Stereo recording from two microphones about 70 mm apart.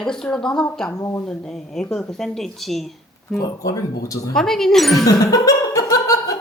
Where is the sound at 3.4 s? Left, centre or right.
Left.